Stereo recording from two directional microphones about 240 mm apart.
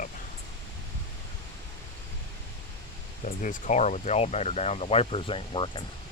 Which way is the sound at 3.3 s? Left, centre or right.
Left.